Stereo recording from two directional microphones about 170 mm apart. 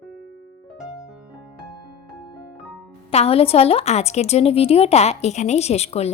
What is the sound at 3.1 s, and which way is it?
A woman's voice, 35° left (ahead or behind).